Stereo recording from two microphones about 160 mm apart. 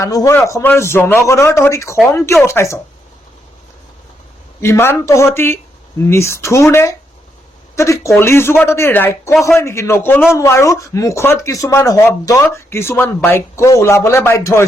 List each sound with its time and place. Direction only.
0.0 s speech: 20° left (ahead or behind)
4.6 s speech: 15° left (ahead or behind)